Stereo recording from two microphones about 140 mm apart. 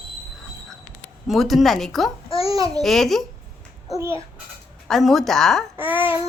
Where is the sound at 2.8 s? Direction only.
Centre (ahead or behind).